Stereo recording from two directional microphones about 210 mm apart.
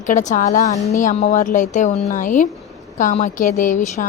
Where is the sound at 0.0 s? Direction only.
35° left (ahead or behind).